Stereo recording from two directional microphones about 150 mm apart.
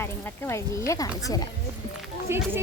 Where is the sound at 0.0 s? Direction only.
15° left (ahead or behind).